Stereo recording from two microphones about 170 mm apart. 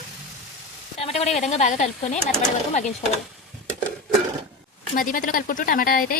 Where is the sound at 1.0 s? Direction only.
35° left (ahead or behind).